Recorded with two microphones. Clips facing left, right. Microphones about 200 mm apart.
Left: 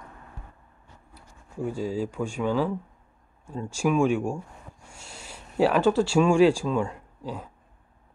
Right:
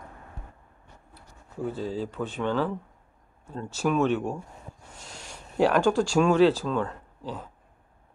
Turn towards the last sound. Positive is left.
turn(degrees=10)  # may be behind; listen again after turning